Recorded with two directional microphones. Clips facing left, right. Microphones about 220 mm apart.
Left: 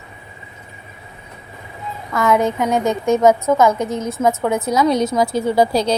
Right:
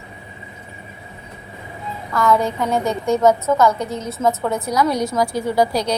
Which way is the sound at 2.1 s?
20° left (ahead or behind).